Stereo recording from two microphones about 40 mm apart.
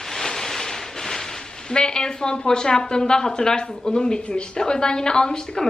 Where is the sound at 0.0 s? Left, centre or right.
Centre.